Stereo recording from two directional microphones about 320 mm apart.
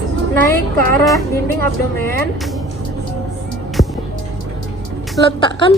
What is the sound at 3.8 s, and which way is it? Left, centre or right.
Music, left.